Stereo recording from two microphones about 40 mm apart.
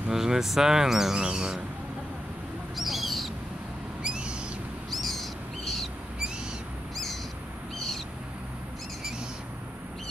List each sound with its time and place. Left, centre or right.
0.1 s speech: centre
1.1 s speech: right
2.8 s owl: centre
4.0 s owl: right
4.9 s owl: centre